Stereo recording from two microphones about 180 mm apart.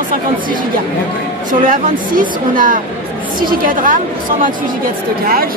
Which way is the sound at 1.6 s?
50° right (ahead or behind).